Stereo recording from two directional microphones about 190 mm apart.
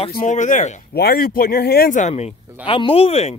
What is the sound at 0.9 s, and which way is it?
Speech, 55° left (ahead or behind).